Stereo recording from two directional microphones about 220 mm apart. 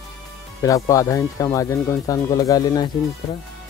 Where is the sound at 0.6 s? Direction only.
15° left (ahead or behind).